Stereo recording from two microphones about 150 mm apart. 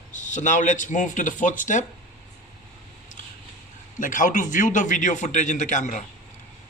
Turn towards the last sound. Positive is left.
turn(degrees=55)  # may be behind; listen again after turning